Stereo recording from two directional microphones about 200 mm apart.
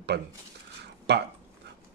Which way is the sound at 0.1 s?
55° right (ahead or behind).